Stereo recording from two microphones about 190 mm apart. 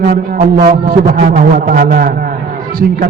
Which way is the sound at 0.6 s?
45° right (ahead or behind).